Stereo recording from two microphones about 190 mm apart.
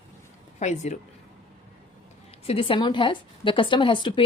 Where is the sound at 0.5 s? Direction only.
40° left (ahead or behind).